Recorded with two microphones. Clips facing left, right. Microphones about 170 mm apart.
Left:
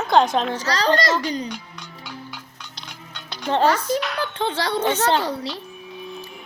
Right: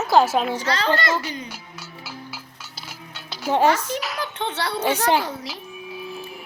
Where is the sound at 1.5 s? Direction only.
5° right (ahead or behind).